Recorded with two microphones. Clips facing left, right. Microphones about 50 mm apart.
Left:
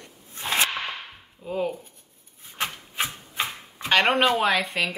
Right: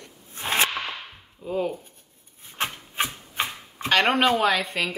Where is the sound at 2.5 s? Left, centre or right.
Right.